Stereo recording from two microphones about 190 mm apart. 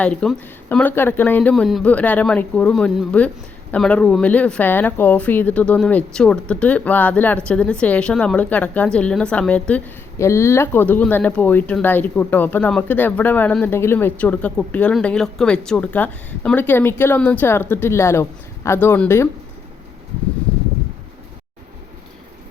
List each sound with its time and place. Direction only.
0.0 s speech: 5° left (ahead or behind)